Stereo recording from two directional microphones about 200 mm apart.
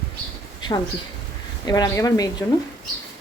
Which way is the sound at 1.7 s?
20° left (ahead or behind).